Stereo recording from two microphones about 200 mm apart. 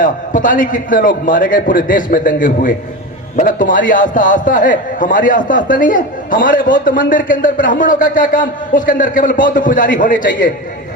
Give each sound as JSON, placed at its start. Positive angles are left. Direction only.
{"t": 0.0, "sound": "a man's voice", "side_deg": 40}